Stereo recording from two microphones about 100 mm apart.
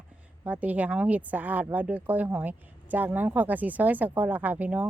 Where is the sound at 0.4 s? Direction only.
15° right (ahead or behind).